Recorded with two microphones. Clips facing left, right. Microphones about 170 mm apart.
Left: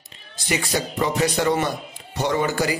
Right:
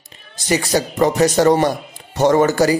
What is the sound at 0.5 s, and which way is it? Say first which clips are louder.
Speech: right 6 dB; 40° right (ahead or behind).